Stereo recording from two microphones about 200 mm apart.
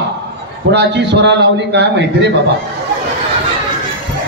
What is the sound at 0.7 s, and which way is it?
A man's voice, 60° right (ahead or behind).